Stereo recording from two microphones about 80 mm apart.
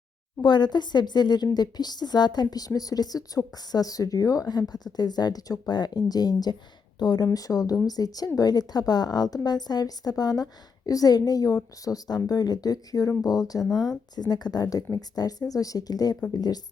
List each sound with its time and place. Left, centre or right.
0.4 s a woman's voice: left
7.3 s a woman's voice: left
13.6 s speech: centre
14.2 s a woman's voice: left